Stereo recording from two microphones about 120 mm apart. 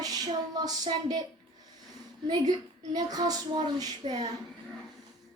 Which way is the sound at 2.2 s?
35° right (ahead or behind).